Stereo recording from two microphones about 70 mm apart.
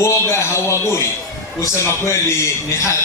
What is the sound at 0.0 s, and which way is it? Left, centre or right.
A man's voice, left.